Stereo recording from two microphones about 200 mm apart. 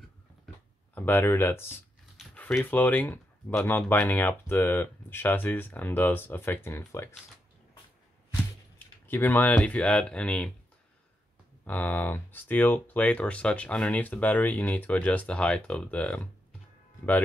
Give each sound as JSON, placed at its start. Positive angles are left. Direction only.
{"t": 0.9, "sound": "speech", "side_deg": 10}
{"t": 8.7, "sound": "speech", "side_deg": 10}
{"t": 11.6, "sound": "speech", "side_deg": 10}